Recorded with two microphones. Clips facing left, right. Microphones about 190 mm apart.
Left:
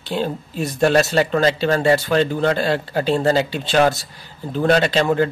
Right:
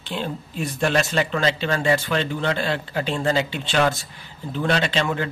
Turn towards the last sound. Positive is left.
turn(degrees=40)  # may be behind; listen again after turning